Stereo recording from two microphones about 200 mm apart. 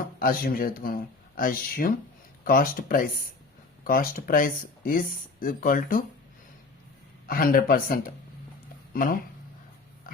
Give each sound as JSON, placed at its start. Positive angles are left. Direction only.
{"t": 0.2, "sound": "speech", "side_deg": 45}
{"t": 7.3, "sound": "speech", "side_deg": 45}